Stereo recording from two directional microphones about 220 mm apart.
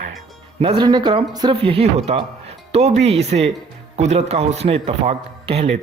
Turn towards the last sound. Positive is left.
turn(degrees=-25)  # may be behind; listen again after turning